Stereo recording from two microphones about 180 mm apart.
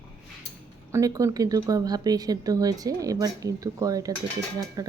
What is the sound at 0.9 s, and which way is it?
Speech, 20° right (ahead or behind).